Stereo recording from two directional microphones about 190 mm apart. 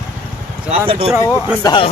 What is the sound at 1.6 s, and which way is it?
Speech, 25° left (ahead or behind).